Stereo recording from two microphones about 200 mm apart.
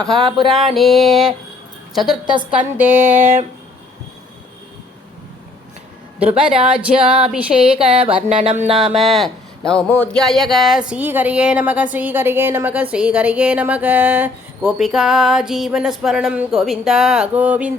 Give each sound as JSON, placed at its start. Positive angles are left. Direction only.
{"t": 0.3, "sound": "a sound", "side_deg": -25}
{"t": 0.8, "sound": "speech", "side_deg": 0}
{"t": 2.7, "sound": "a sound", "side_deg": -10}
{"t": 6.1, "sound": "speech", "side_deg": -5}
{"t": 8.0, "sound": "music", "side_deg": -35}
{"t": 9.0, "sound": "speech", "side_deg": 0}